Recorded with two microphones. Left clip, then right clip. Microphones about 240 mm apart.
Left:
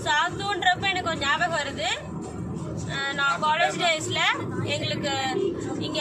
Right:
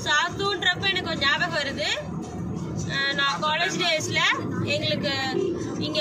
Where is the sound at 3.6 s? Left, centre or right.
Centre.